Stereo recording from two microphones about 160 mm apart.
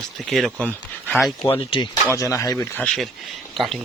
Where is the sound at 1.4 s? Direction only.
30° left (ahead or behind).